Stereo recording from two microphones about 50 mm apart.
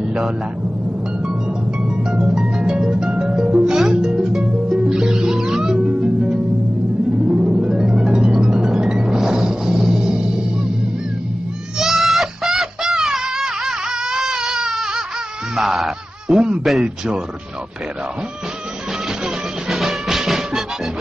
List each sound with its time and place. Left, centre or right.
2.0 s music: centre
11.8 s a sound: centre
15.5 s honk: centre
16.6 s a man's voice: centre
19.7 s music: centre